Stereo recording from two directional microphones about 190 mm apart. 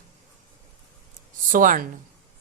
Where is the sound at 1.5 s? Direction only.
45° right (ahead or behind).